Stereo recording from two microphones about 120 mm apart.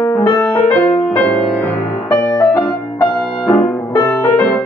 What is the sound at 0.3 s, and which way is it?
Music, 30° left (ahead or behind).